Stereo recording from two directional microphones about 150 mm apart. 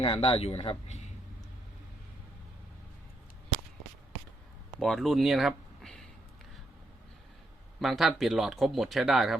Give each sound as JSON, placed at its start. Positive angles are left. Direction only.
{"t": 0.0, "sound": "a man's voice", "side_deg": 40}
{"t": 4.8, "sound": "speech", "side_deg": 0}
{"t": 7.8, "sound": "speech", "side_deg": 0}